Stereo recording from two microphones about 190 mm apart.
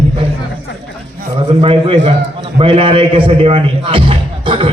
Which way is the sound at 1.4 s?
30° right (ahead or behind).